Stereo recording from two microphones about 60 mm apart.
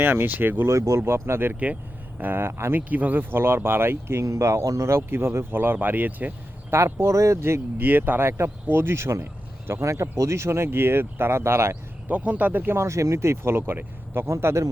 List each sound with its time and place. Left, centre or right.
0.0 s speech: right
0.7 s speech: right
1.5 s speech: right
2.9 s speech: right
4.9 s speech: right
6.7 s speech: right
7.8 s speech: right
12.0 s speech: right
12.7 s speech: right
14.3 s speech: right